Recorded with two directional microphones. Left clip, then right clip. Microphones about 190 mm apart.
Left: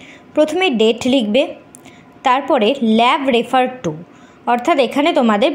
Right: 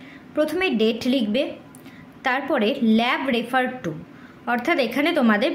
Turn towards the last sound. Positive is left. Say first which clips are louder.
# left 6 dB
turn(degrees=20)  # may be behind; listen again after turning